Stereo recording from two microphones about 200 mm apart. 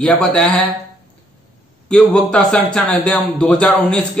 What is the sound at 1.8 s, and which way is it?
A man's voice, 5° left (ahead or behind).